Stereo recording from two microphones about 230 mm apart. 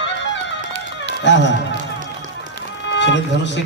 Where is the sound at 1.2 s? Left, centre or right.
Left.